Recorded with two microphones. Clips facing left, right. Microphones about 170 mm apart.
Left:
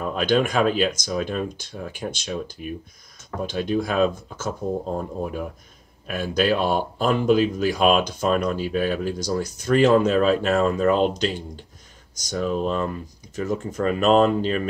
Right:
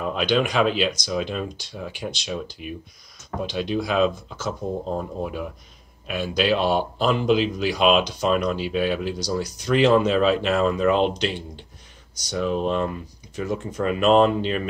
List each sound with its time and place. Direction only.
0.0 s speech: 45° left (ahead or behind)